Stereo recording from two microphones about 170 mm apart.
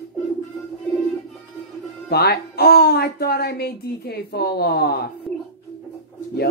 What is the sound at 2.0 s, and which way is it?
Speech, 70° left (ahead or behind).